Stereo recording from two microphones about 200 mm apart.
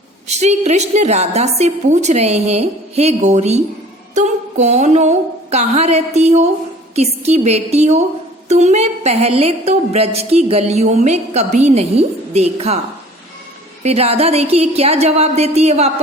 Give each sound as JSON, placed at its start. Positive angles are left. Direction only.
{"t": 0.3, "sound": "a woman's voice", "side_deg": -35}
{"t": 13.8, "sound": "a woman's voice", "side_deg": -30}